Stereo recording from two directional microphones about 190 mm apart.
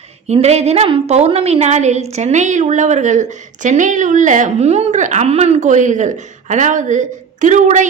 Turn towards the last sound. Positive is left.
turn(degrees=-40)  # may be behind; listen again after turning